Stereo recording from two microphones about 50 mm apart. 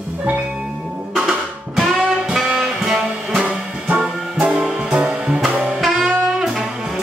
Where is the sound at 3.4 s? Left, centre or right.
Right.